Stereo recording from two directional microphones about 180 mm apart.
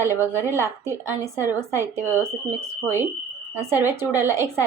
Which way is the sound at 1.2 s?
10° right (ahead or behind).